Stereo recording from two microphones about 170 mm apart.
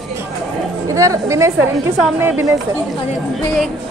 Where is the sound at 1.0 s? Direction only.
20° right (ahead or behind).